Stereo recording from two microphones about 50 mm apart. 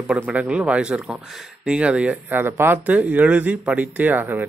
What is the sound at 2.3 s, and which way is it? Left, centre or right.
Speech, right.